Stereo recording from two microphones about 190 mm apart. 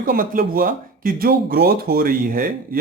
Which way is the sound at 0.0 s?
50° right (ahead or behind).